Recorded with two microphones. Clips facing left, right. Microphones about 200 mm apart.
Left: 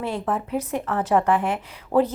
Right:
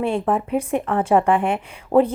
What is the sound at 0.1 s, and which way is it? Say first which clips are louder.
Speech: right 5 dB; 15° right (ahead or behind).